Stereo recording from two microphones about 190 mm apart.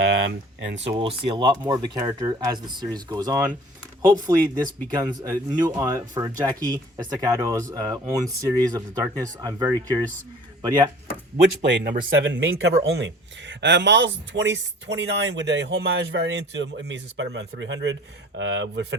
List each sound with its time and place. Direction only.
0.0 s speech: 85° right
0.9 s speech: 30° right (ahead or behind)
11.6 s speech: 65° right (ahead or behind)